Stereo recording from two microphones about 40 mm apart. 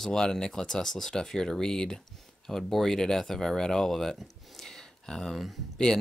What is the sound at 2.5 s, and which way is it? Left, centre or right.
Speech, centre.